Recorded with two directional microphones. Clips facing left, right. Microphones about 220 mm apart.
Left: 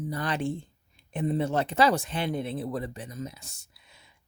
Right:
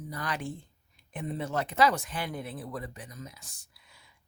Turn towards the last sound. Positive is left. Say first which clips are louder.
# left 2 dB
turn(degrees=25)  # may be behind; listen again after turning